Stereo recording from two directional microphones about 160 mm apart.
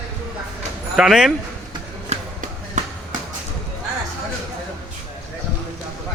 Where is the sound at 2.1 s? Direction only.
45° right (ahead or behind).